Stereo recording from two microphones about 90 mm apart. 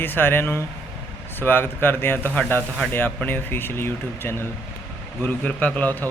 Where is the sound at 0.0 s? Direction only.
25° left (ahead or behind).